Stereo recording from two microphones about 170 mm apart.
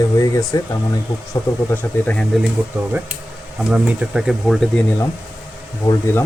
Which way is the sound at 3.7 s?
5° right (ahead or behind).